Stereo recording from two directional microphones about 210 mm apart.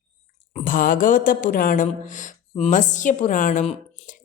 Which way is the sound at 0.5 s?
40° left (ahead or behind).